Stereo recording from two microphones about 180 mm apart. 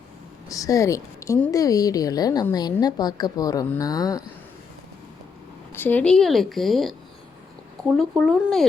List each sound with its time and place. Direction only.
0.4 s a woman's voice: 20° left (ahead or behind)
5.7 s a woman's voice: 10° left (ahead or behind)